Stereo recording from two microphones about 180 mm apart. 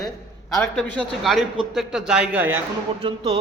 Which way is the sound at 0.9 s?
Centre (ahead or behind).